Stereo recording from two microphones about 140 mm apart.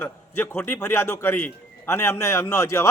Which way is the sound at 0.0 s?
15° left (ahead or behind).